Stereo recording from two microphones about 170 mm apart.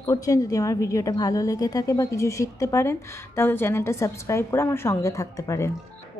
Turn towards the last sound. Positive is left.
turn(degrees=20)  # may be behind; listen again after turning